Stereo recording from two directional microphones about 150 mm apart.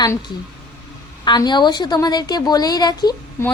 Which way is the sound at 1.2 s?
30° left (ahead or behind).